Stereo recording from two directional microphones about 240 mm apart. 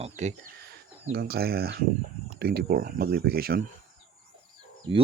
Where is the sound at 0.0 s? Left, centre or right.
Right.